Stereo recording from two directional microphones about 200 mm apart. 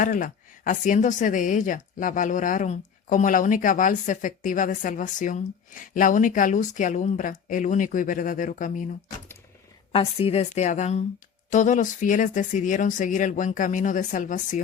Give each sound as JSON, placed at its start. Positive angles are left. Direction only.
{"t": 0.0, "sound": "a woman's voice", "side_deg": 40}
{"t": 9.9, "sound": "a woman's voice", "side_deg": 30}